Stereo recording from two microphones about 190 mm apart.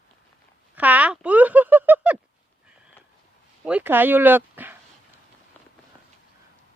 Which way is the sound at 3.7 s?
10° right (ahead or behind).